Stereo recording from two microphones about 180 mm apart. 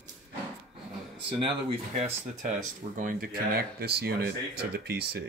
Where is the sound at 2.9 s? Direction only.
50° right (ahead or behind).